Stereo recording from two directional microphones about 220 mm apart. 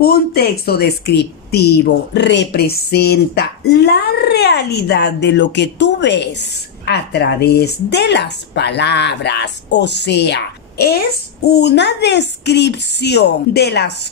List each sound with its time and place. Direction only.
0.0 s a woman's voice: 45° left (ahead or behind)